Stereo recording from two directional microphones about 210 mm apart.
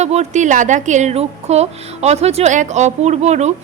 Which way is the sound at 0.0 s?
30° right (ahead or behind).